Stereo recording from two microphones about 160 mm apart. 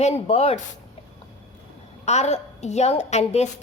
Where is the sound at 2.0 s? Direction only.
45° left (ahead or behind).